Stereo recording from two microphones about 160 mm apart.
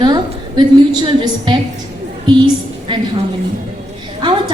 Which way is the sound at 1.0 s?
30° right (ahead or behind).